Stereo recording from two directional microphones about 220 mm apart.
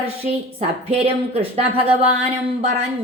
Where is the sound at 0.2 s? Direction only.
30° right (ahead or behind).